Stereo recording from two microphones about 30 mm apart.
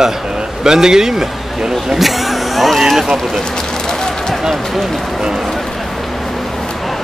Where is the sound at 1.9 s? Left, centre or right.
Centre.